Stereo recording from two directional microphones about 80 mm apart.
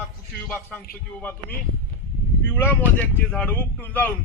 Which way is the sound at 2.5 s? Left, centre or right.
Left.